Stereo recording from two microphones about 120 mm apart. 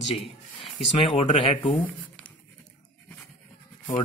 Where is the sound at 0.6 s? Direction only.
45° left (ahead or behind).